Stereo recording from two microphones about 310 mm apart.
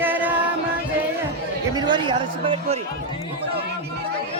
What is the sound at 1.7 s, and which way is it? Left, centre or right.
Speech, centre.